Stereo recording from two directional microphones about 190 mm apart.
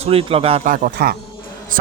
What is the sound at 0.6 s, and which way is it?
Speech, 45° right (ahead or behind).